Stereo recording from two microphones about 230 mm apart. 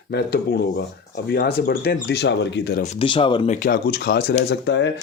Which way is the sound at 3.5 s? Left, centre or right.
Left.